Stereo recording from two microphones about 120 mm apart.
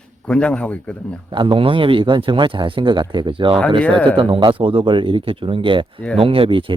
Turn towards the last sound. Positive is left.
turn(degrees=-45)  # may be behind; listen again after turning